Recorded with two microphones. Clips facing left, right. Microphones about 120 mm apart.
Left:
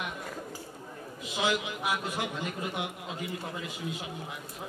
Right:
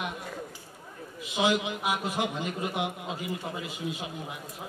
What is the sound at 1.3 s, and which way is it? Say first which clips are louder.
A man's voice: right 4 dB; 20° right (ahead or behind).